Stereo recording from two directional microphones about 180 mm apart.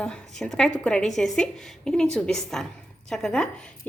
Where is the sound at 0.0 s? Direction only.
5° left (ahead or behind).